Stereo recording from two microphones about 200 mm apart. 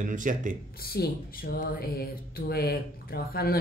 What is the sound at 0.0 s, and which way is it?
Speech, 40° right (ahead or behind).